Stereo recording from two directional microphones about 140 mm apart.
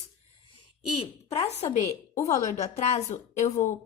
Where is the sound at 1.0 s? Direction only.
45° left (ahead or behind).